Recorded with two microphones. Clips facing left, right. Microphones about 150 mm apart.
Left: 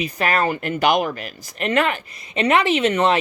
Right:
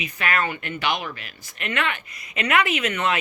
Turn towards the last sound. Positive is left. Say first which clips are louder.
# left 7 dB
turn(degrees=35)  # may be behind; listen again after turning